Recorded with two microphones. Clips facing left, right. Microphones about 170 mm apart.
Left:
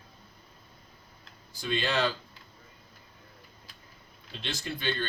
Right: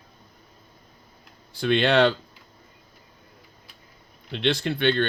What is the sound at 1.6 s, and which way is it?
Speech, 65° right (ahead or behind).